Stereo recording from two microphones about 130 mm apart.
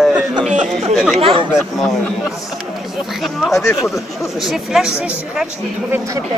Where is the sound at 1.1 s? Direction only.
45° right (ahead or behind).